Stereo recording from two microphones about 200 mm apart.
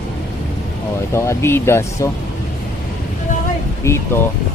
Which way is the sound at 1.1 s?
15° left (ahead or behind).